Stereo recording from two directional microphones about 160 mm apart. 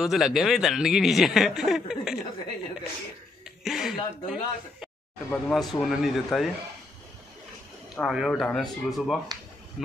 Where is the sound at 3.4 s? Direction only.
Centre (ahead or behind).